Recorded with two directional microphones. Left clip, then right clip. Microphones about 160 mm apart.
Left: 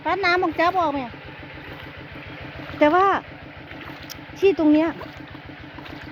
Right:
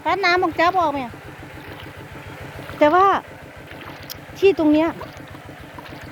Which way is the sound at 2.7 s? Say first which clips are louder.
Right 2 dB; 5° left (ahead or behind).